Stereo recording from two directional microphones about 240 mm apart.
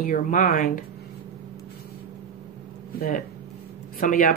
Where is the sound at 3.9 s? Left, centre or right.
Left.